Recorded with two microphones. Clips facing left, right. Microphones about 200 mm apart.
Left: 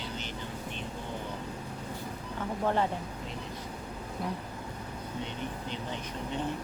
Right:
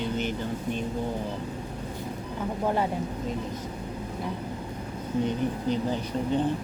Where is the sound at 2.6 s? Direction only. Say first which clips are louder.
Right 2 dB; 10° right (ahead or behind).